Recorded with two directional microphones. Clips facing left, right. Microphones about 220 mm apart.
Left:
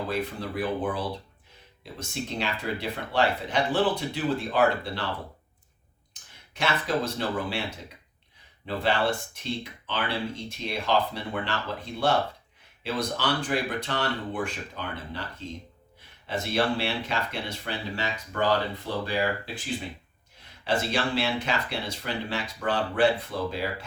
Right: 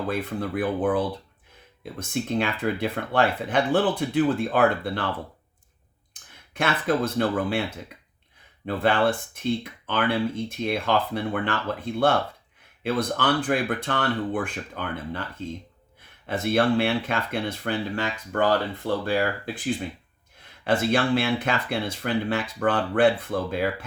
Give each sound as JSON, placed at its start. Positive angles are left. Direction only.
{"t": 0.1, "sound": "speech", "side_deg": -55}
{"t": 6.5, "sound": "speech", "side_deg": -55}
{"t": 8.6, "sound": "speech", "side_deg": -55}
{"t": 12.8, "sound": "speech", "side_deg": -55}
{"t": 20.7, "sound": "speech", "side_deg": -55}